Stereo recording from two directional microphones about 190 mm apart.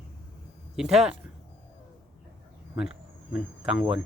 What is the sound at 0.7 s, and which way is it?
Speech, centre (ahead or behind).